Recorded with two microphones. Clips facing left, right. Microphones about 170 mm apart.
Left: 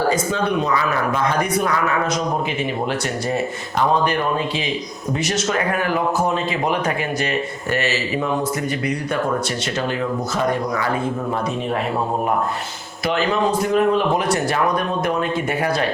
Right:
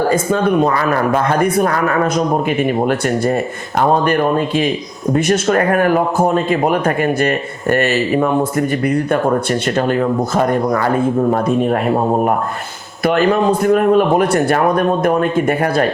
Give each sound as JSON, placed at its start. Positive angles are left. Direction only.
{"t": 0.1, "sound": "a man's voice", "side_deg": -50}
{"t": 13.1, "sound": "a man's voice", "side_deg": -55}